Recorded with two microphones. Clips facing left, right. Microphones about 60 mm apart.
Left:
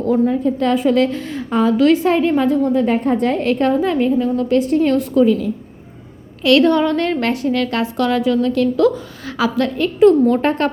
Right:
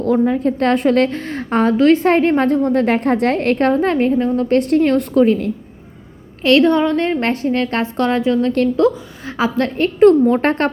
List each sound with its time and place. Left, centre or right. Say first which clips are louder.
0.0 s a woman's voice: right 1 dB; right
1.7 s a woman's voice: right 2 dB; right
4.5 s a woman's voice: right 1 dB; right
4.8 s a woman's voice: right 1 dB; right
6.4 s a woman's voice: even; right